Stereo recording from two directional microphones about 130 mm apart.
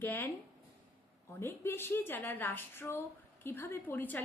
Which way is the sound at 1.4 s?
15° left (ahead or behind).